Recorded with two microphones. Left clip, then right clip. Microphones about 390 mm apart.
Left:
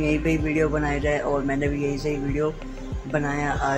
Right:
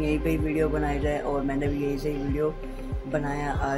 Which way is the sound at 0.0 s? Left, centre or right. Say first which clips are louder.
Left 3 dB; right.